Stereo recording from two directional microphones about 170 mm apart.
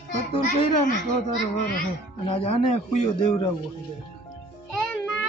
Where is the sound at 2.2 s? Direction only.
35° left (ahead or behind).